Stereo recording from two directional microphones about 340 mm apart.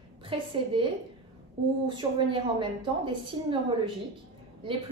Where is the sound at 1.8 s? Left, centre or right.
Centre.